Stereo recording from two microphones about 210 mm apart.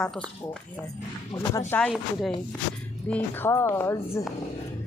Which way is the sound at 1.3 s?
15° left (ahead or behind).